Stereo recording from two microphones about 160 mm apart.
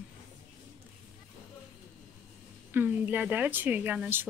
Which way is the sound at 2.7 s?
10° right (ahead or behind).